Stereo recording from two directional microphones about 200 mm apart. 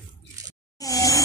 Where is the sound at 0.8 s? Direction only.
15° left (ahead or behind).